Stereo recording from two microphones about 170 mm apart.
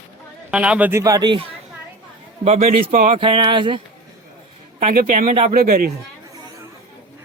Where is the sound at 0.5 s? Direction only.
5° right (ahead or behind); by 1.5 s 25° right (ahead or behind).